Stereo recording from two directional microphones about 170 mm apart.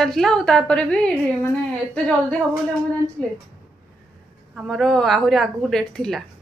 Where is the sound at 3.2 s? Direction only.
5° left (ahead or behind).